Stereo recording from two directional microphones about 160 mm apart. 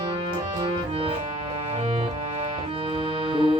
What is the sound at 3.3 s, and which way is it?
Music, 30° right (ahead or behind).